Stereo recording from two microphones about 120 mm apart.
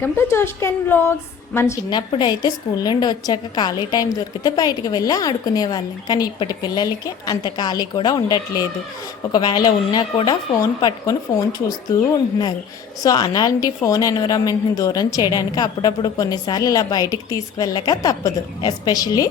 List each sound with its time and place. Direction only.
0.0 s a woman's voice: 20° left (ahead or behind)
1.9 s a woman's voice: 35° left (ahead or behind)